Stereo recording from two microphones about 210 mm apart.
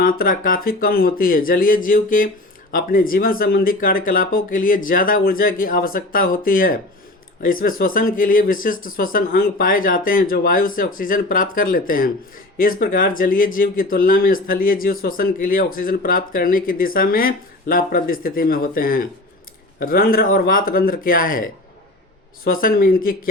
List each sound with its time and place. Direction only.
0.0 s speech: 40° left (ahead or behind)